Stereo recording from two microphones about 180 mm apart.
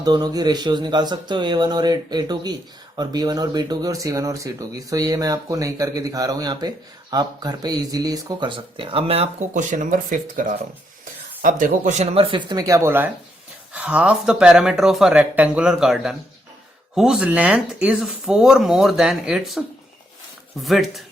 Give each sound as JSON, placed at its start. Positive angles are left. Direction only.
{"t": 0.0, "sound": "speech", "side_deg": -20}